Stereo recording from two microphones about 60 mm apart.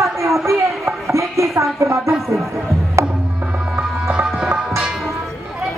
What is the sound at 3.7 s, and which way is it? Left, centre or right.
Music, centre.